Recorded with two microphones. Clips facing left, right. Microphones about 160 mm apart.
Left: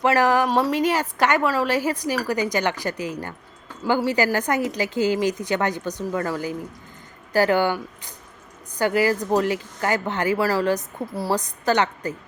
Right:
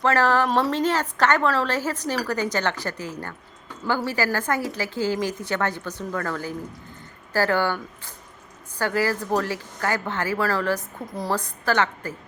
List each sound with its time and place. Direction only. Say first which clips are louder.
0.0 s a woman's voice: left 2 dB; 15° left (ahead or behind)